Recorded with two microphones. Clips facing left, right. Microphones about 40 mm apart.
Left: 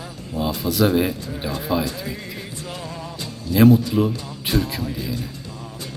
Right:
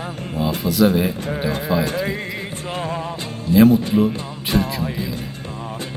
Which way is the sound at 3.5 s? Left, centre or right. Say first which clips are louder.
Right 4 dB; right.